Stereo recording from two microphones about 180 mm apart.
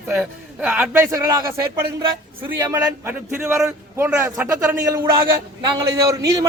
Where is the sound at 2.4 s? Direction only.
10° right (ahead or behind).